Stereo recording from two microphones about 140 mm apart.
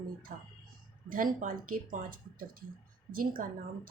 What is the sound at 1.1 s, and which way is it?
Speech, 80° right.